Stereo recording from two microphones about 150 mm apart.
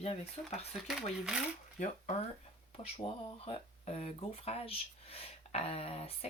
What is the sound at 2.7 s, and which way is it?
Speech, 40° left (ahead or behind).